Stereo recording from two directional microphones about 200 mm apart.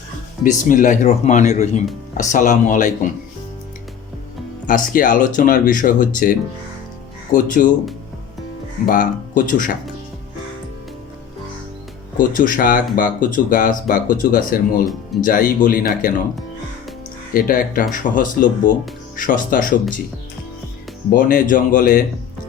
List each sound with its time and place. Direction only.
0.4 s speech: 40° left (ahead or behind)
4.6 s speech: 40° left (ahead or behind)
7.3 s speech: 40° left (ahead or behind)
8.9 s speech: 40° left (ahead or behind)
12.1 s speech: 40° left (ahead or behind)
17.3 s speech: 45° left (ahead or behind)
21.1 s speech: 45° left (ahead or behind)